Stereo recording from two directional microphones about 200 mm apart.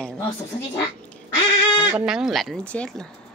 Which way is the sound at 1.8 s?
5° right (ahead or behind).